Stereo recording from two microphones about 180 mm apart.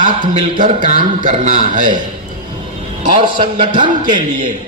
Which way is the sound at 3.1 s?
25° right (ahead or behind).